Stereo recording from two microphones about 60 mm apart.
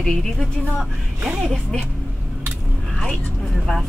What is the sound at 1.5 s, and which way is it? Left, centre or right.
Speech, centre.